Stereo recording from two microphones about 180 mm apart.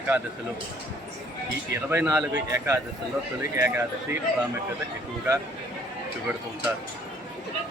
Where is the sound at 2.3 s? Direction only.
20° right (ahead or behind).